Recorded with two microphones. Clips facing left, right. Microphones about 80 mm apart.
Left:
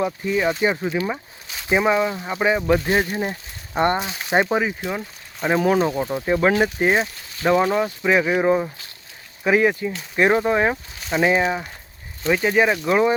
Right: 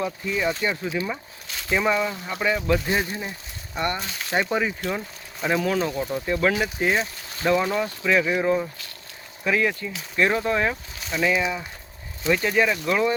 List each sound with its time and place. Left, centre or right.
0.0 s speech: left
5.5 s speech: left
6.2 s speech: left
11.1 s speech: left
12.3 s speech: centre